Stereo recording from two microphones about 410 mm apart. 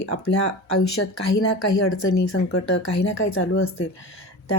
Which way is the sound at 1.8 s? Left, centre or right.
Left.